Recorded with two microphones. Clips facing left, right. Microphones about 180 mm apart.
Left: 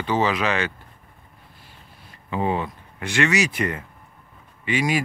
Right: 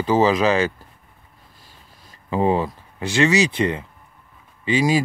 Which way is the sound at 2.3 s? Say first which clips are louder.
Right 5 dB; 35° right (ahead or behind).